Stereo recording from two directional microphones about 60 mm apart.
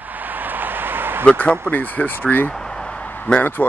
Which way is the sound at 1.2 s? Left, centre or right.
Left.